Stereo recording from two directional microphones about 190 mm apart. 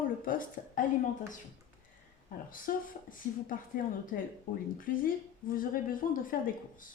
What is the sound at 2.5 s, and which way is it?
Speech, 45° left (ahead or behind).